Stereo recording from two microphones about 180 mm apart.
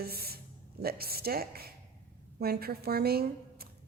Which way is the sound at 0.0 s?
60° right (ahead or behind).